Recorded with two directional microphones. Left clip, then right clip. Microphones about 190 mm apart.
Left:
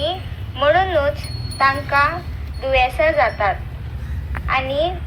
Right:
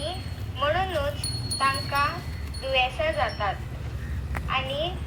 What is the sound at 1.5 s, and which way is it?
A child's voice, 30° left (ahead or behind).